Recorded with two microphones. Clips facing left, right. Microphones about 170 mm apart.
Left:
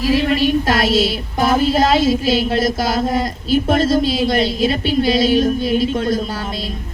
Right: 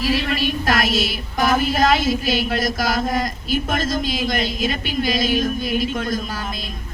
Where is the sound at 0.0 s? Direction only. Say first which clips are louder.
Left 6 dB; 30° left (ahead or behind).